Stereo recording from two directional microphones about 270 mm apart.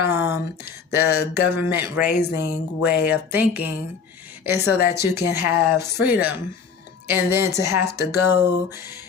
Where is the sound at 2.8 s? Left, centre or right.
Centre.